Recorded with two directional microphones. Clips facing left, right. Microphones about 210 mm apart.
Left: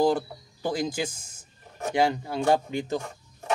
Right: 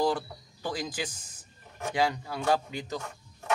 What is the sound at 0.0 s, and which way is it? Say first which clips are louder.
Speech: left 5 dB; 25° left (ahead or behind).